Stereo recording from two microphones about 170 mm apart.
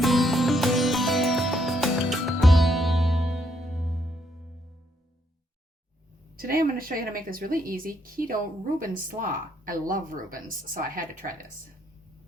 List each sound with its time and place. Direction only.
0.0 s music: centre (ahead or behind)
6.3 s speech: 60° right (ahead or behind)